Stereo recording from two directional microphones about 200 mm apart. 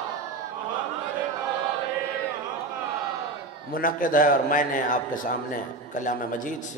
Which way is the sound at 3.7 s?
45° left (ahead or behind).